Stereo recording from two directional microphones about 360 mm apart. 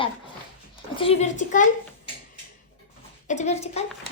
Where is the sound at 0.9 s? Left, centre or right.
Centre.